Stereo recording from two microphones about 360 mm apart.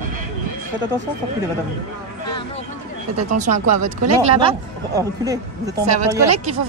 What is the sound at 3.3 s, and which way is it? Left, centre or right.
Speech, right.